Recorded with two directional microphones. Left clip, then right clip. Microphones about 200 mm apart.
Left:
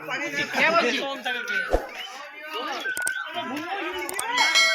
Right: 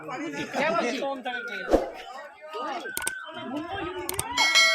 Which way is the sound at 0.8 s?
35° right (ahead or behind).